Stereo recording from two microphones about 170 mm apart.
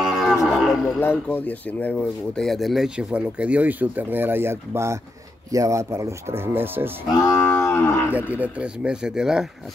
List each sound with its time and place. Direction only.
0.0 s cattle: 5° right (ahead or behind)
0.9 s speech: 10° left (ahead or behind); by 6.9 s 10° right (ahead or behind)
7.2 s cattle: 15° left (ahead or behind)
8.1 s speech: 10° right (ahead or behind)